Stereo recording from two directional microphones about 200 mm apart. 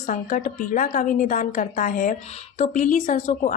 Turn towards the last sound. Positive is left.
turn(degrees=35)  # may be behind; listen again after turning